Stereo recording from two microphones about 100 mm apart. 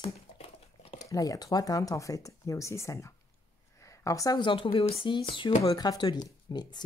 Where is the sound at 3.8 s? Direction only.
35° left (ahead or behind).